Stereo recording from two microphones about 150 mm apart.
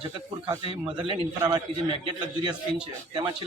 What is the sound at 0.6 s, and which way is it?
Speech, 40° right (ahead or behind).